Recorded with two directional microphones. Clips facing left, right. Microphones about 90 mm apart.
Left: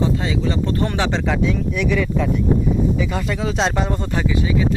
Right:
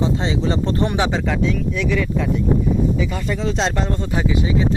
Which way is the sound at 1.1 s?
Centre (ahead or behind).